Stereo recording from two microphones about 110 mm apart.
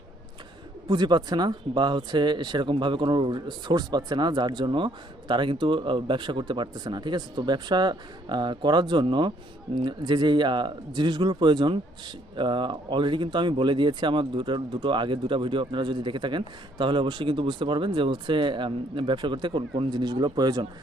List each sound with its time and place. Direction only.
0.9 s speech: 40° right (ahead or behind)